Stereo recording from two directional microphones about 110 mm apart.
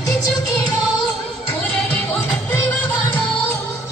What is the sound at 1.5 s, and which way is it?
Music, 15° left (ahead or behind).